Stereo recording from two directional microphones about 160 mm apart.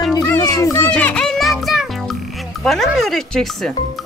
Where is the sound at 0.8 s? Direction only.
5° left (ahead or behind).